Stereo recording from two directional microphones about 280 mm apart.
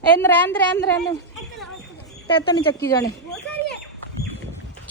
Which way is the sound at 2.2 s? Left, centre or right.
Centre.